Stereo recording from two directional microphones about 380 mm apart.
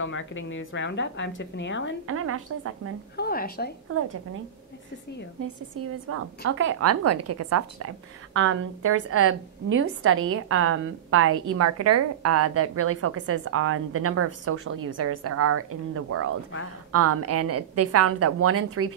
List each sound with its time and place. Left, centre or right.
0.0 s a woman's voice: left
2.0 s a woman's voice: right
3.2 s a woman's voice: left
5.4 s a woman's voice: right